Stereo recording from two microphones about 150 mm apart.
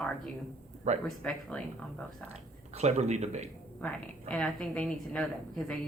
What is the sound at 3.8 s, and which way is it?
A woman's voice, 10° left (ahead or behind).